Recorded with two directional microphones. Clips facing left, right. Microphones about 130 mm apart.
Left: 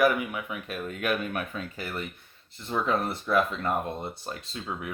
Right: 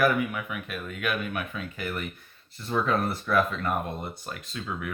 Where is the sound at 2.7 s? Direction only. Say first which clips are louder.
Right 1 dB; 20° left (ahead or behind).